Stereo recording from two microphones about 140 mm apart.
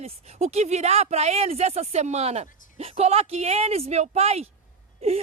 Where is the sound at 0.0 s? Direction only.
50° right (ahead or behind).